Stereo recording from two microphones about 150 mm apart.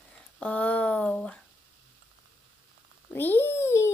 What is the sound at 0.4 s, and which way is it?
A woman's voice, 10° left (ahead or behind).